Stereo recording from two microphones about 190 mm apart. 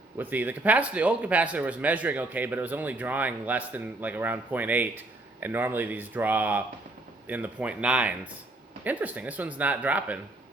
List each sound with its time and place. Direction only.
0.2 s speech: 10° right (ahead or behind)